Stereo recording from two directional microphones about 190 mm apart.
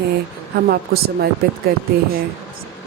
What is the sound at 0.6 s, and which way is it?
Speech, 55° right (ahead or behind).